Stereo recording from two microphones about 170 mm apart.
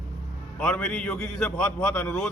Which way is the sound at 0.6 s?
5° left (ahead or behind).